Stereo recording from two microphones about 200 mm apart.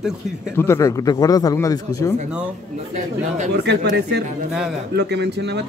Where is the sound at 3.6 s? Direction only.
55° right (ahead or behind).